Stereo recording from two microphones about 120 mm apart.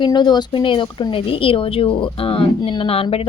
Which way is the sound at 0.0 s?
40° left (ahead or behind).